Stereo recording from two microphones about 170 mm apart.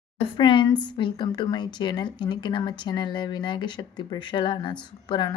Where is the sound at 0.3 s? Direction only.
30° left (ahead or behind).